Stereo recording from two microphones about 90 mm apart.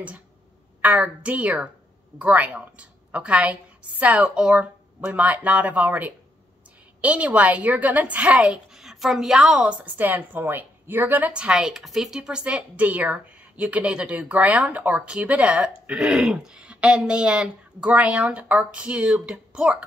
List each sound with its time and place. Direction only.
0.8 s a woman's voice: 15° right (ahead or behind)